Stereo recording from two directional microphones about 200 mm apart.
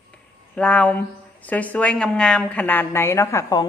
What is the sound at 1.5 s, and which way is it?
A woman's voice, 5° left (ahead or behind).